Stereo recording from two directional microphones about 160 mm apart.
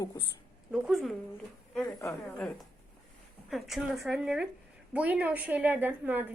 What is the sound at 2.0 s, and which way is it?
Speech, 20° left (ahead or behind).